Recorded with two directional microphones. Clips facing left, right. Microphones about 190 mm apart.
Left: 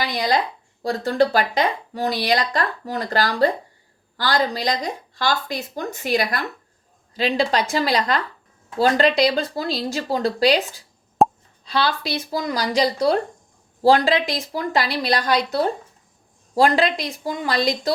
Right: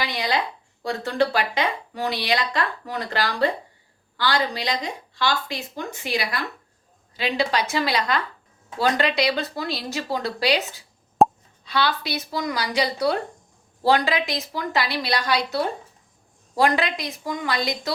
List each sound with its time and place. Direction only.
0.0 s speech: 40° left (ahead or behind)
11.2 s plop: centre (ahead or behind)
11.6 s speech: 35° left (ahead or behind)
16.6 s speech: 35° left (ahead or behind)